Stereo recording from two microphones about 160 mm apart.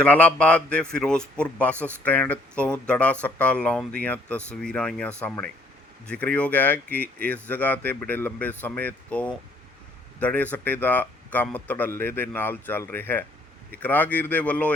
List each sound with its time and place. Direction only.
0.0 s speech: 10° left (ahead or behind)